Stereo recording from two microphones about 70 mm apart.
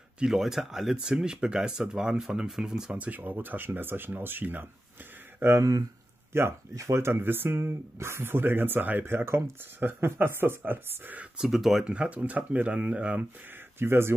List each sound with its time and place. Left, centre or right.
0.2 s speech: centre
3.0 s speech: right
5.6 s speech: right
6.3 s speech: right
11.3 s speech: centre
11.8 s speech: centre
13.7 s speech: right